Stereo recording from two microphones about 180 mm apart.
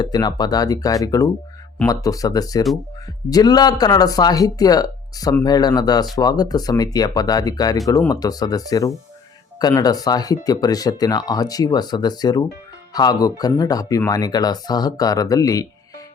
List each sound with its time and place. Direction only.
0.0 s speech: 25° left (ahead or behind)